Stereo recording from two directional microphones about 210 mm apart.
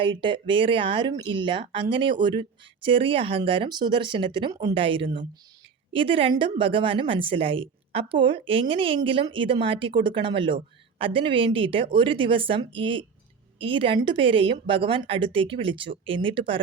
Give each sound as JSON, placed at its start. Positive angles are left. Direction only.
{"t": 0.0, "sound": "a woman's voice", "side_deg": -25}